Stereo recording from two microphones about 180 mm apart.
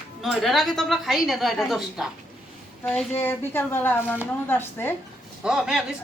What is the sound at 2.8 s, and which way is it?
A woman's voice, 10° left (ahead or behind).